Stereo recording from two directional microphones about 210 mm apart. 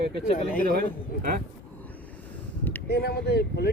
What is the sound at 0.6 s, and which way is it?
Speech, 45° right (ahead or behind).